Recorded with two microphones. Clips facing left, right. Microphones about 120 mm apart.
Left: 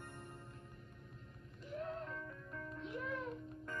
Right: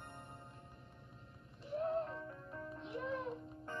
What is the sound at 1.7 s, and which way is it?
Music, 35° right (ahead or behind).